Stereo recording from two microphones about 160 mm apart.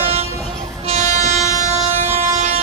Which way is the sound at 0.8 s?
45° right (ahead or behind).